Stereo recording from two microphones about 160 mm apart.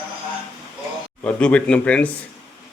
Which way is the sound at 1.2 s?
5° left (ahead or behind).